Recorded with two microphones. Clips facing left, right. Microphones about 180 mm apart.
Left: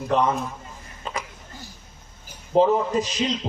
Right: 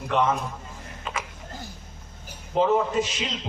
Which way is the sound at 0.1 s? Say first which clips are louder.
Left 2 dB; 35° left (ahead or behind).